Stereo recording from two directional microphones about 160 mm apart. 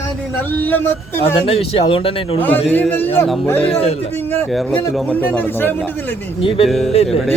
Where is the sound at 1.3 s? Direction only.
35° left (ahead or behind).